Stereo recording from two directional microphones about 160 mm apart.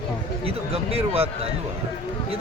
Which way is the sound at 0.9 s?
40° right (ahead or behind).